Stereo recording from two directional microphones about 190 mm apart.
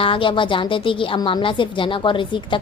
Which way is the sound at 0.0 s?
25° left (ahead or behind).